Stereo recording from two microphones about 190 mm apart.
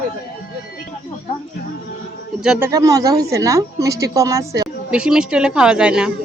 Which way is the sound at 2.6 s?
20° right (ahead or behind).